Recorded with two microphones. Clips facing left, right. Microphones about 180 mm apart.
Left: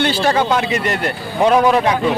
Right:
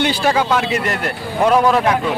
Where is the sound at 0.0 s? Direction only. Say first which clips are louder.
Left 1 dB; 10° right (ahead or behind).